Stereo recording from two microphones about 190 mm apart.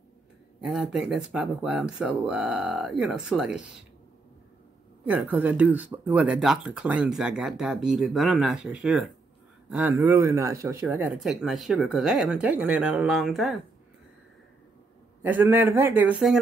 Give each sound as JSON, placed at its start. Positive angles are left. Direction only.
{"t": 0.6, "sound": "speech", "side_deg": -5}
{"t": 5.0, "sound": "speech", "side_deg": -10}
{"t": 15.2, "sound": "a man's voice", "side_deg": -10}